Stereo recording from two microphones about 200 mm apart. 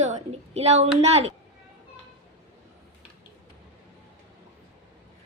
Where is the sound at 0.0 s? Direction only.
35° right (ahead or behind).